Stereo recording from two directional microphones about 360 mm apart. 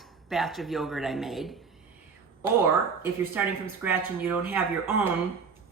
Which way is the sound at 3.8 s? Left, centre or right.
Centre.